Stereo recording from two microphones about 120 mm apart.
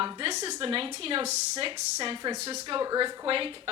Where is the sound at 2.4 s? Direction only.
65° right (ahead or behind).